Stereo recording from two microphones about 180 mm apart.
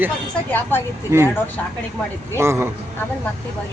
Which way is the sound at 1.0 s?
15° right (ahead or behind).